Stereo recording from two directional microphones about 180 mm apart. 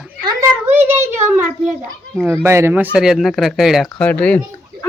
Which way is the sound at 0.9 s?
15° right (ahead or behind).